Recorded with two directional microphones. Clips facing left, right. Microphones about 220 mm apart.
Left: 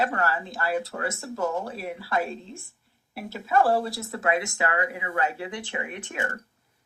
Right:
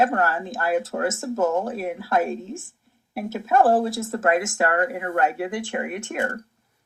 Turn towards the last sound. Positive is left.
turn(degrees=-45)  # may be behind; listen again after turning